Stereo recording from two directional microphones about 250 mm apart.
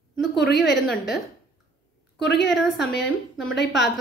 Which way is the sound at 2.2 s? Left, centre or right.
Left.